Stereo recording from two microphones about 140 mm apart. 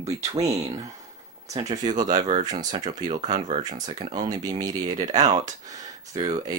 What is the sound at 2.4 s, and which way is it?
Speech, 30° right (ahead or behind).